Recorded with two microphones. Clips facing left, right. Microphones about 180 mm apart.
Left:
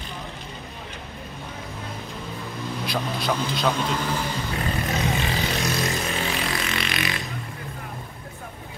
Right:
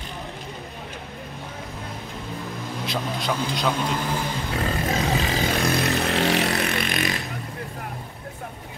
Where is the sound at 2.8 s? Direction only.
20° right (ahead or behind).